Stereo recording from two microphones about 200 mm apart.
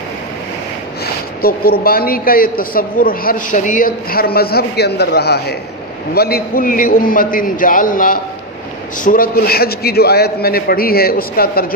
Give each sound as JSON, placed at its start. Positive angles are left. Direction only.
{"t": 1.0, "sound": "a woman's voice", "side_deg": 50}